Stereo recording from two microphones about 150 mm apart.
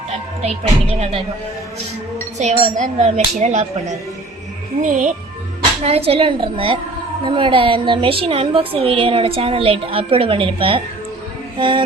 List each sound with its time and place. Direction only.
0.4 s speech: 45° right (ahead or behind)
2.4 s speech: 50° right (ahead or behind)
5.8 s a woman's voice: 40° right (ahead or behind)